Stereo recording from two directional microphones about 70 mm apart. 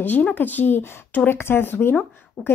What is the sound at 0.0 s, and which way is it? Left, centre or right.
Speech, left.